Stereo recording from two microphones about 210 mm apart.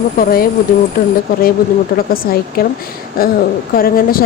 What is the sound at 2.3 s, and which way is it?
Speech, 45° left (ahead or behind).